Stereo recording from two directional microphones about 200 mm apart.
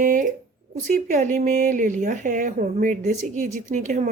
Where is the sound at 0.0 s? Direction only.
40° right (ahead or behind).